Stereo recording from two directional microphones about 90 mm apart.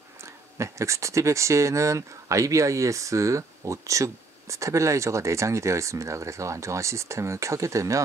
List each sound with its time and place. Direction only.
0.2 s speech: 35° right (ahead or behind)